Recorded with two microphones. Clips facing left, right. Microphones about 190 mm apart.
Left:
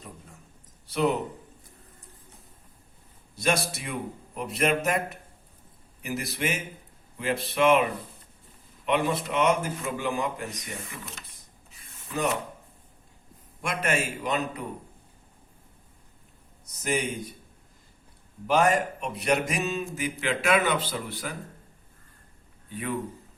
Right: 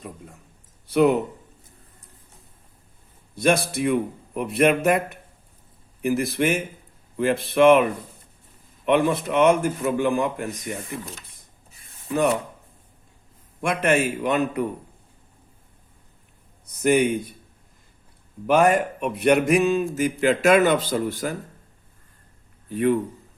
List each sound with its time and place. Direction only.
3.3 s a man's voice: 55° right (ahead or behind)
6.0 s speech: 55° right (ahead or behind)
8.9 s speech: 55° right (ahead or behind)
13.6 s a man's voice: 55° right (ahead or behind)
16.8 s a man's voice: 60° right (ahead or behind)
18.4 s speech: 55° right (ahead or behind)
22.7 s speech: 45° right (ahead or behind)